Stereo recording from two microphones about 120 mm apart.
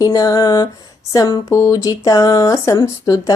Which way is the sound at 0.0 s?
30° left (ahead or behind).